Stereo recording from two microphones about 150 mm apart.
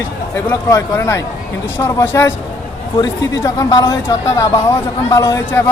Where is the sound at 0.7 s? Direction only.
20° left (ahead or behind).